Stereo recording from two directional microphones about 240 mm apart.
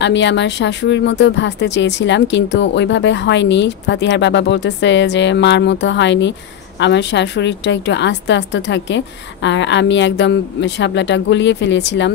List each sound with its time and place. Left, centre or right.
0.0 s speech: left